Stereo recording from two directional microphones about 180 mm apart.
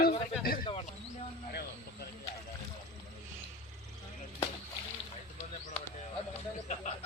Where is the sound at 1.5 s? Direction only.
60° left (ahead or behind).